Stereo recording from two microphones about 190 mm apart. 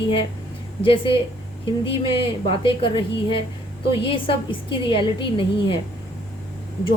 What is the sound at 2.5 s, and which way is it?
Speech, 25° left (ahead or behind).